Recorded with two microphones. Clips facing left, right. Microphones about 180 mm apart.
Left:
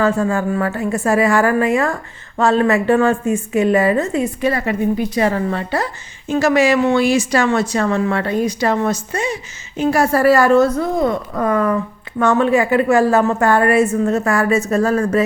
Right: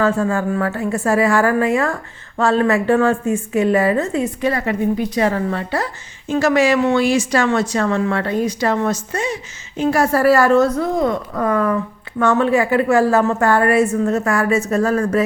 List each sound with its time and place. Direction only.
0.0 s speech: 15° left (ahead or behind)
5.5 s a woman's voice: 20° left (ahead or behind)
6.3 s speech: 10° left (ahead or behind)
10.7 s a woman's voice: centre (ahead or behind)
11.3 s a woman's voice: 20° left (ahead or behind)